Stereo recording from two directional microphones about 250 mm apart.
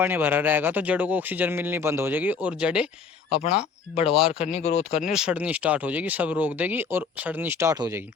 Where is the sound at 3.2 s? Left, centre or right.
Left.